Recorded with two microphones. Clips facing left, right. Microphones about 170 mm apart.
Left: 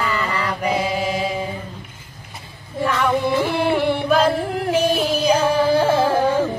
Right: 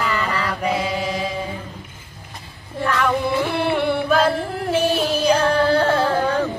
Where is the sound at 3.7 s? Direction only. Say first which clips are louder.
Even; 5° left (ahead or behind).